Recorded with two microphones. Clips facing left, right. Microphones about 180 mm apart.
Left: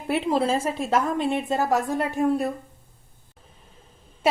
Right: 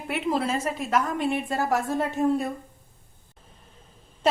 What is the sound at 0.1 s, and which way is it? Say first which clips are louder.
A woman's voice: left 4 dB; 30° left (ahead or behind).